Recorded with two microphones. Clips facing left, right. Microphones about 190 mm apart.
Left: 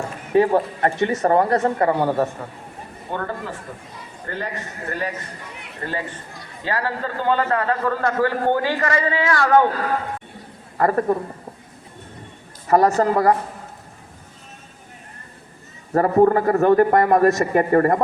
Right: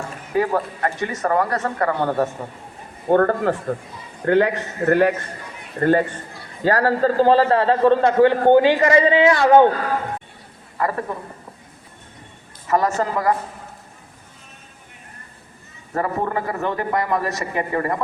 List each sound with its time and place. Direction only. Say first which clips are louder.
0.3 s speech: left 4 dB; 30° left (ahead or behind)
2.0 s a man's voice: even; centre (ahead or behind)
3.1 s a man's voice: right 12 dB; 55° right (ahead or behind)
5.8 s speech: right 11 dB; 50° right (ahead or behind)
6.7 s a man's voice: right 8 dB; 40° right (ahead or behind); by 9.6 s 20° right (ahead or behind)
10.8 s a man's voice: left 5 dB; 45° left (ahead or behind)
12.6 s speech: left 4 dB; 40° left (ahead or behind)
15.9 s a man's voice: left 8 dB; 40° left (ahead or behind)